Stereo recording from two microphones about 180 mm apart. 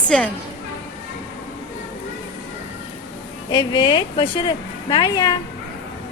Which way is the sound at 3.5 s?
25° left (ahead or behind).